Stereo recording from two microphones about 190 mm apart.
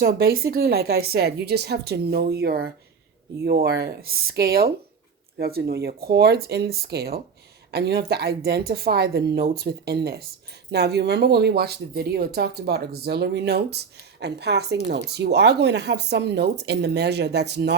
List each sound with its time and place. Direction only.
0.0 s speech: 55° right (ahead or behind)